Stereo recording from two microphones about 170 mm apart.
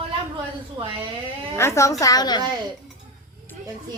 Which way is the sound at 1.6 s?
15° left (ahead or behind).